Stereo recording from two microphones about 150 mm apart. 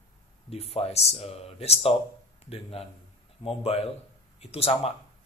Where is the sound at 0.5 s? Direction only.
40° left (ahead or behind).